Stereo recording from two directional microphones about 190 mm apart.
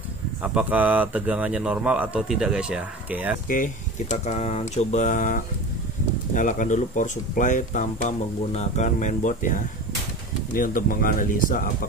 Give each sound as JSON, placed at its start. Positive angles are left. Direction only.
{"t": 0.4, "sound": "speech", "side_deg": -10}
{"t": 3.4, "sound": "speech", "side_deg": 45}